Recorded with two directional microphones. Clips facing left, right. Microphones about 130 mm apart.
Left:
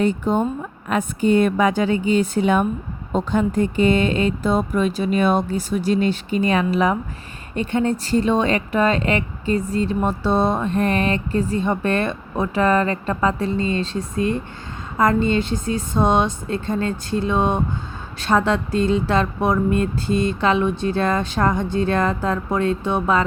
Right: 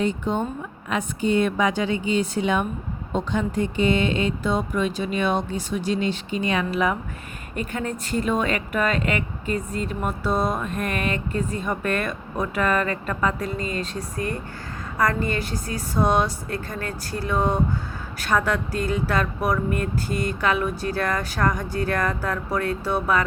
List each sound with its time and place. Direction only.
0.0 s speech: 50° left (ahead or behind); by 23.2 s 20° left (ahead or behind)